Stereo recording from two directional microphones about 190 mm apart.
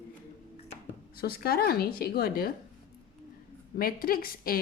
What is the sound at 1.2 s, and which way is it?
A woman's voice, 50° left (ahead or behind).